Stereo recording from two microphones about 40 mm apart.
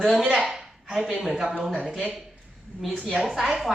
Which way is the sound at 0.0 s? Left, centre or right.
Centre.